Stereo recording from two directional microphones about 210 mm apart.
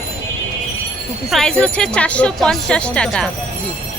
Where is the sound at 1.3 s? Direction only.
5° left (ahead or behind).